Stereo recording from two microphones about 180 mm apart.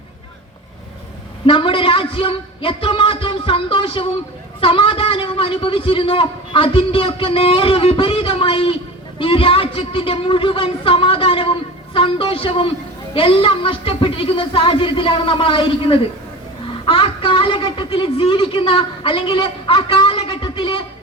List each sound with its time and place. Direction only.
1.5 s a man's voice: 30° left (ahead or behind)